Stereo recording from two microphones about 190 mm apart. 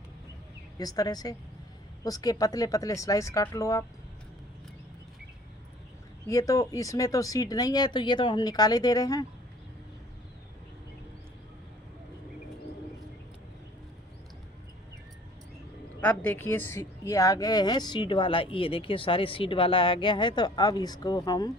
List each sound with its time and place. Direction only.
0.8 s speech: 20° left (ahead or behind)
6.2 s speech: 15° left (ahead or behind)
16.0 s speech: 10° left (ahead or behind)